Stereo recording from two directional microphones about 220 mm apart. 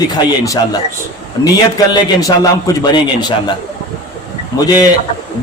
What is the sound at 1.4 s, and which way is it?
A man's voice, 15° left (ahead or behind).